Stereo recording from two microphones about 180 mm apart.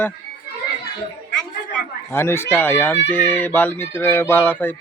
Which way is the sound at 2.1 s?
15° left (ahead or behind).